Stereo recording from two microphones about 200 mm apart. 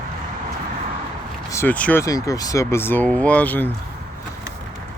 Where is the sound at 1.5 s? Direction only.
10° left (ahead or behind).